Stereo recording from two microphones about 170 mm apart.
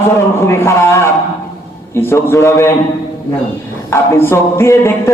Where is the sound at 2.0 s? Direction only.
15° left (ahead or behind).